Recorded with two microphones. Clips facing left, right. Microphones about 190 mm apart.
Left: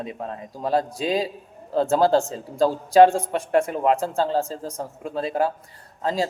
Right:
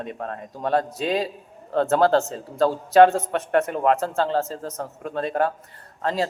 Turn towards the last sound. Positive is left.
turn(degrees=10)  # may be behind; listen again after turning